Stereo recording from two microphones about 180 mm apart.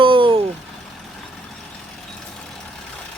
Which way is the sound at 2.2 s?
Centre (ahead or behind).